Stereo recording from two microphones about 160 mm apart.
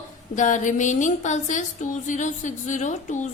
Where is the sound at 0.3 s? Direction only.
50° left (ahead or behind).